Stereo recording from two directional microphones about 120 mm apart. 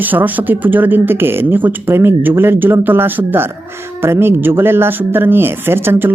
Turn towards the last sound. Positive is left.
turn(degrees=-20)  # may be behind; listen again after turning